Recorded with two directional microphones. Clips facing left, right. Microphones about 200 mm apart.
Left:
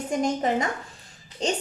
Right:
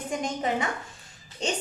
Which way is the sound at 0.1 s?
40° left (ahead or behind).